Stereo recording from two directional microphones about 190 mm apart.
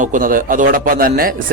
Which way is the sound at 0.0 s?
45° right (ahead or behind).